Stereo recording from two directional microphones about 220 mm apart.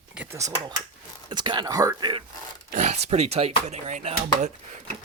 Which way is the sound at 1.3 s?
20° right (ahead or behind).